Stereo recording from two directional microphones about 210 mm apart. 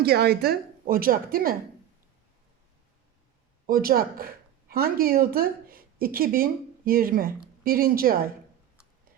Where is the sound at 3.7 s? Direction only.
45° right (ahead or behind).